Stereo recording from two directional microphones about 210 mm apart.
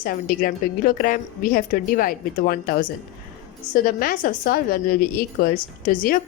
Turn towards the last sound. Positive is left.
turn(degrees=40)  # may be behind; listen again after turning